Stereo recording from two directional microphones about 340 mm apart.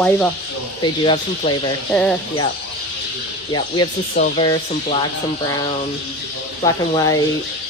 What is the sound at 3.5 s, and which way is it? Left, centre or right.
Speech, centre.